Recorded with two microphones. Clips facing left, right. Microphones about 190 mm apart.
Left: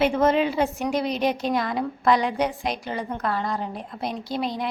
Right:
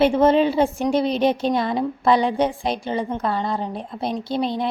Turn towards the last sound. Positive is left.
turn(degrees=-25)  # may be behind; listen again after turning